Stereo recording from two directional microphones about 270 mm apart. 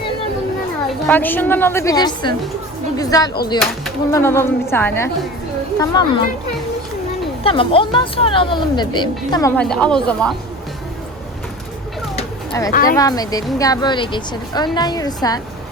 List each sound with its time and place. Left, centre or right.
0.9 s speech: centre
7.4 s speech: centre
9.6 s speech: centre
12.6 s speech: centre